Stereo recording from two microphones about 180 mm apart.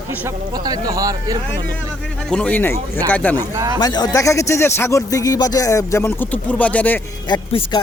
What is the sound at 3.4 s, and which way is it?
Speech, 20° right (ahead or behind).